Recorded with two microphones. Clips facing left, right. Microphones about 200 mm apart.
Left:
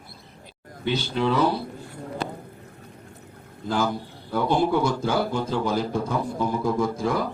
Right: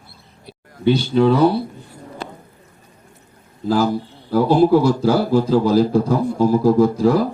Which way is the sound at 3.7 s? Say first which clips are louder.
Right 7 dB; 35° right (ahead or behind).